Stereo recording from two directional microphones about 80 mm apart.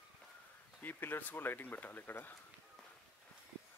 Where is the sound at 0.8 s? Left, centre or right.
Left.